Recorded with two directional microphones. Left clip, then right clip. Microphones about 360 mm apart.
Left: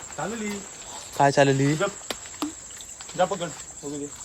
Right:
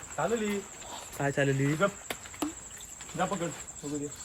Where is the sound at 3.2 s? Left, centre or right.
Left.